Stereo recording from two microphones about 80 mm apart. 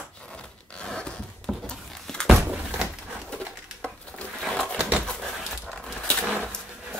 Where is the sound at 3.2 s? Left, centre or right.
Centre.